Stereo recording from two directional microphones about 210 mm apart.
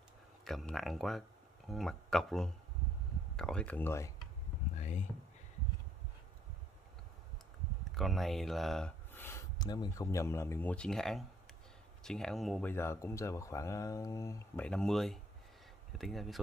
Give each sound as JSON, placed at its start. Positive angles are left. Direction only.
{"t": 0.5, "sound": "speech", "side_deg": 0}
{"t": 4.7, "sound": "a sound", "side_deg": 35}
{"t": 7.8, "sound": "speech", "side_deg": 0}
{"t": 14.7, "sound": "speech", "side_deg": 0}